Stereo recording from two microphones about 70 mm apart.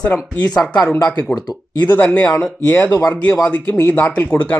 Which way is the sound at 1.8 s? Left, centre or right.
Left.